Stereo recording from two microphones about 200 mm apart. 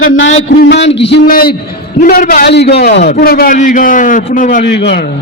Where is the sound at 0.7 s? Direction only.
60° left (ahead or behind); by 4.6 s 40° left (ahead or behind).